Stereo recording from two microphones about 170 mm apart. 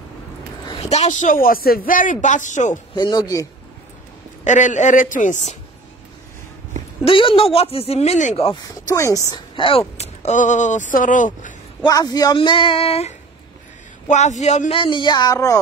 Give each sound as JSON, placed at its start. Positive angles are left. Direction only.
{"t": 0.8, "sound": "speech", "side_deg": 40}
{"t": 3.0, "sound": "speech", "side_deg": 25}
{"t": 4.5, "sound": "speech", "side_deg": 45}
{"t": 7.1, "sound": "speech", "side_deg": 30}
{"t": 8.6, "sound": "speech", "side_deg": 20}
{"t": 11.8, "sound": "speech", "side_deg": 20}
{"t": 14.8, "sound": "speech", "side_deg": 30}